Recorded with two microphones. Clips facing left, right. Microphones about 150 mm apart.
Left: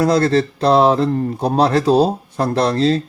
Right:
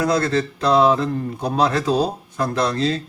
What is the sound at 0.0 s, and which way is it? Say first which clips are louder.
Speech: left 5 dB; 30° left (ahead or behind).